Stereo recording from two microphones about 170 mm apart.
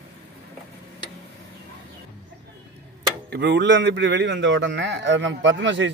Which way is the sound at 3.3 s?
80° right.